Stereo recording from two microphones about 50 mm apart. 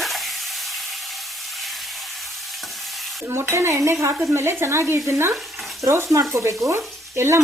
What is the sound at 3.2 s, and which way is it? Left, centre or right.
Speech, right.